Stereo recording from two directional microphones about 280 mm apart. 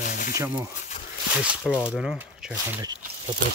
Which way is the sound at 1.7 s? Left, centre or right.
Centre.